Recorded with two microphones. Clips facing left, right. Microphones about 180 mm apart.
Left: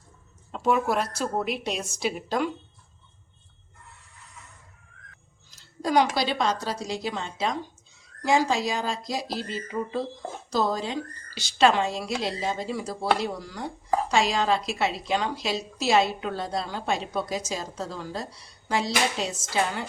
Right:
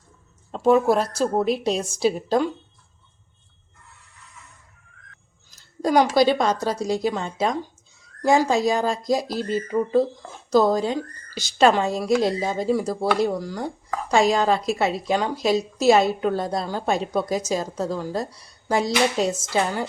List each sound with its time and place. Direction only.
0.5 s a woman's voice: 35° right (ahead or behind)
5.8 s a woman's voice: 45° right (ahead or behind)